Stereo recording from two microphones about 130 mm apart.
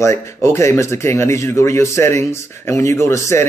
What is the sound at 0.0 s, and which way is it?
Speech, 20° left (ahead or behind).